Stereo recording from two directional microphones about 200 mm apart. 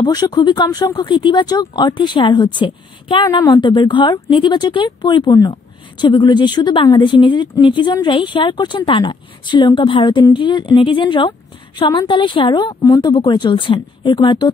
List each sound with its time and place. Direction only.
0.0 s speech: 20° left (ahead or behind)